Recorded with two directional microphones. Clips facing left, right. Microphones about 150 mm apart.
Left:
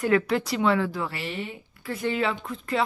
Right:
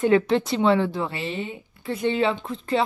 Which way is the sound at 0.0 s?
25° right (ahead or behind).